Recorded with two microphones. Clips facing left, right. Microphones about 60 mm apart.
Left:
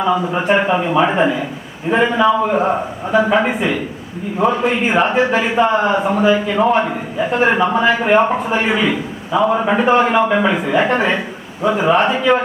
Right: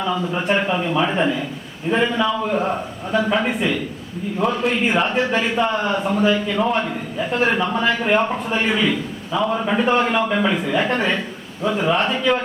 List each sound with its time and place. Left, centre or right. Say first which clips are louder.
0.0 s a man's voice: left 5 dB; centre
9.8 s a man's voice: left 5 dB; centre